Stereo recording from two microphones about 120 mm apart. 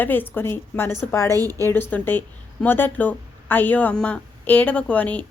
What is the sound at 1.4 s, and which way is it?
Speech, 30° right (ahead or behind).